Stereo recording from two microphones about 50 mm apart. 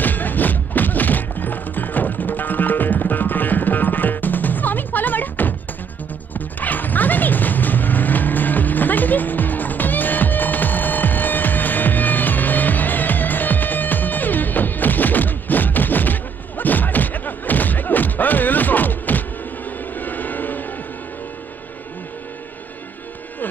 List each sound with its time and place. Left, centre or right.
0.0 s music: left